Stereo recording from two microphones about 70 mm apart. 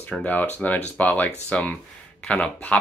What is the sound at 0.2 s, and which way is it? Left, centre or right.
Speech, left.